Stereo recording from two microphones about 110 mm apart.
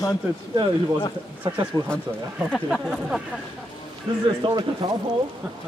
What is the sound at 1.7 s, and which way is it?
Speech, 35° right (ahead or behind).